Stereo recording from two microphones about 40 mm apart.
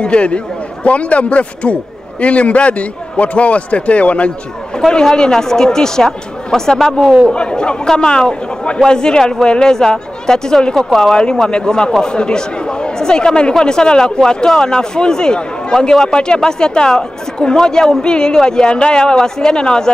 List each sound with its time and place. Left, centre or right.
0.0 s a man's voice: left
4.7 s speech: centre
7.3 s speech: left